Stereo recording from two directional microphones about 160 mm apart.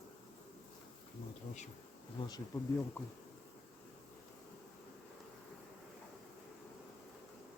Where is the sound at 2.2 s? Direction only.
25° left (ahead or behind).